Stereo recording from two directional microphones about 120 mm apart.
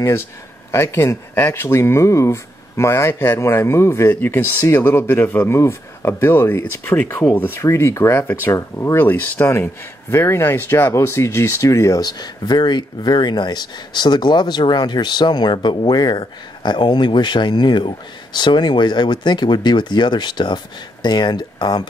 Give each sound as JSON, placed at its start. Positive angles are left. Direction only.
{"t": 0.7, "sound": "speech", "side_deg": 20}